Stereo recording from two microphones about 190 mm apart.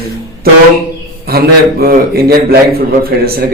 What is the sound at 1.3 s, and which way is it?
A man's voice, 55° right (ahead or behind).